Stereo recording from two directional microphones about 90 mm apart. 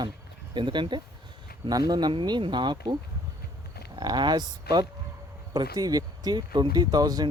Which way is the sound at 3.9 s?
55° right (ahead or behind).